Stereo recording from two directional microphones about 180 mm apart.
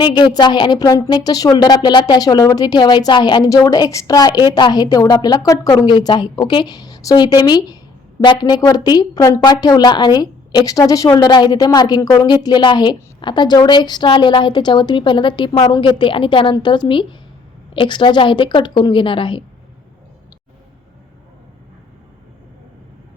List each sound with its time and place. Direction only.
0.0 s a woman's voice: 25° left (ahead or behind)